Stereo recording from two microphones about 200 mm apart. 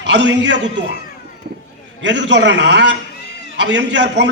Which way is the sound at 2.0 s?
65° right (ahead or behind).